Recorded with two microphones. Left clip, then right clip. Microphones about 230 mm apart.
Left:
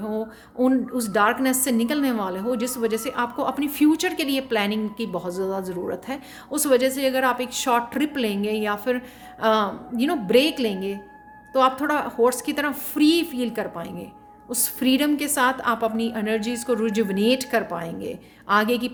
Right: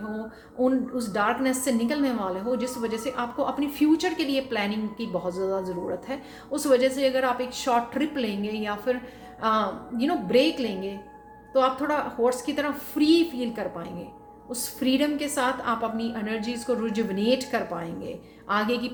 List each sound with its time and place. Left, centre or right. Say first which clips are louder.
0.6 s a woman's voice: left 3 dB; left